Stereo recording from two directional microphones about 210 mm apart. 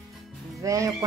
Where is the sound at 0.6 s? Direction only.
15° right (ahead or behind).